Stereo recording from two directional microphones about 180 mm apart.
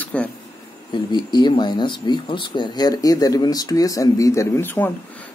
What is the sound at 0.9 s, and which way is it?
Speech, 25° left (ahead or behind).